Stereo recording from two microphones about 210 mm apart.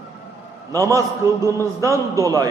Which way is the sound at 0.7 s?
15° right (ahead or behind).